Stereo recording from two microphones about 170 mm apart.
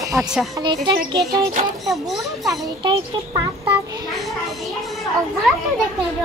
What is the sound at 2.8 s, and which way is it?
Speech, 30° right (ahead or behind).